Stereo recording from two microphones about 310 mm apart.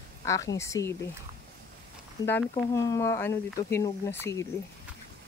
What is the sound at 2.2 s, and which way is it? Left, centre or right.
Speech, centre.